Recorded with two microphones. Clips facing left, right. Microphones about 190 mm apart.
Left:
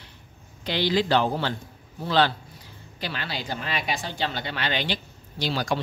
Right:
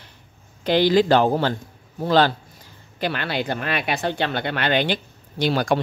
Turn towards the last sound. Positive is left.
turn(degrees=-55)  # may be behind; listen again after turning